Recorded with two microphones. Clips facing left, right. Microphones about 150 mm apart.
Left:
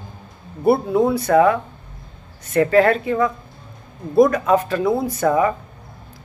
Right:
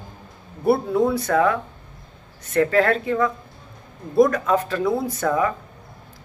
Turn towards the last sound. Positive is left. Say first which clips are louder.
# left 4 dB
turn(degrees=10)  # may be behind; listen again after turning